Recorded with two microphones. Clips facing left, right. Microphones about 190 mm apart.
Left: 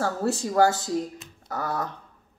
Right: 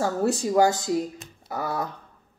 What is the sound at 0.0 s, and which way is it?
A woman's voice, 15° right (ahead or behind).